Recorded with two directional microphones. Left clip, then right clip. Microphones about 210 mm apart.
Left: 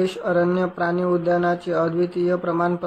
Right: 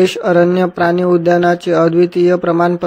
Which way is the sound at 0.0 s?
35° right (ahead or behind).